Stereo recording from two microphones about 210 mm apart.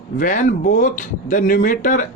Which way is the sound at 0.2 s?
40° left (ahead or behind).